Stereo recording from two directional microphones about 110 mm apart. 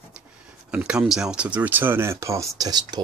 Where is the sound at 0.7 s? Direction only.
10° right (ahead or behind); by 3.0 s 40° right (ahead or behind).